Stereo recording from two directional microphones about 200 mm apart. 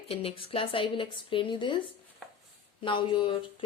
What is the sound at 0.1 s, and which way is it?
Speech, 30° left (ahead or behind).